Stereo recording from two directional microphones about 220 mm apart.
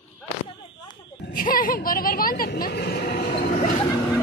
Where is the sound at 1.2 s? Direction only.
40° left (ahead or behind).